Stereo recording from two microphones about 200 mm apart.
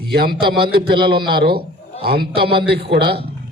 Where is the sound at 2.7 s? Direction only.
55° right (ahead or behind).